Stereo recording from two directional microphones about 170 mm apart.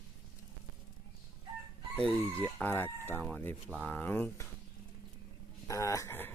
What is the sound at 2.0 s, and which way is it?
Speech, 5° left (ahead or behind).